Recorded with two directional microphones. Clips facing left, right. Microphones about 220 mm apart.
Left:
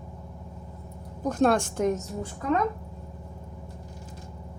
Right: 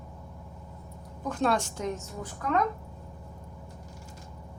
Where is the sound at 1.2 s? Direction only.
45° left (ahead or behind).